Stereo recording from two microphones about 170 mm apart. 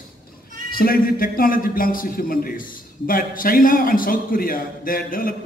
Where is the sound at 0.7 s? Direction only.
60° left (ahead or behind).